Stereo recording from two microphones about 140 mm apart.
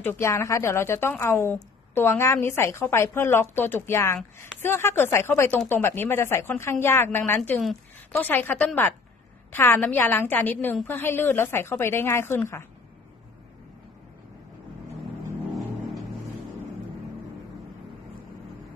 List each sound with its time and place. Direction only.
0.0 s a woman's voice: 20° left (ahead or behind)